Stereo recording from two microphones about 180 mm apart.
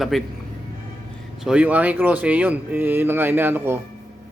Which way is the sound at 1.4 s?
5° right (ahead or behind).